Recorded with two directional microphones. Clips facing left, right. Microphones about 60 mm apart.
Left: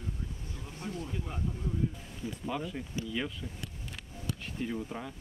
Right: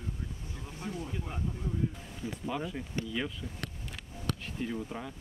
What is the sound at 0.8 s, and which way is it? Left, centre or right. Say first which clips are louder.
Speech: even; centre.